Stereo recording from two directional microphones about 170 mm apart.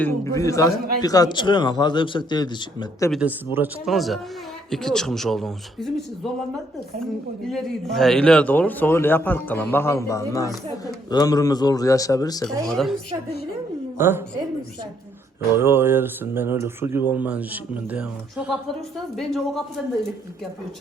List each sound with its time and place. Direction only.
0.0 s a man's voice: 20° left (ahead or behind)
3.1 s speech: 10° right (ahead or behind)
3.9 s speech: centre (ahead or behind)
7.5 s a man's voice: centre (ahead or behind); by 12.5 s 20° left (ahead or behind)
12.6 s speech: 5° left (ahead or behind)
14.0 s speech: 15° right (ahead or behind)
15.5 s speech: 15° right (ahead or behind)